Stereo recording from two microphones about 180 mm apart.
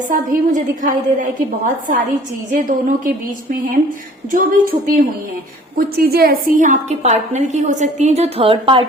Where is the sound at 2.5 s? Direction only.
45° right (ahead or behind).